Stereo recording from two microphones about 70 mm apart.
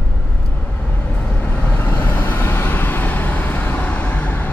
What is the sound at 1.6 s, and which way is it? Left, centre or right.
Vehicle, left.